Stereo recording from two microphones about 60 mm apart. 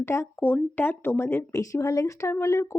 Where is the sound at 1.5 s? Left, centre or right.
Left.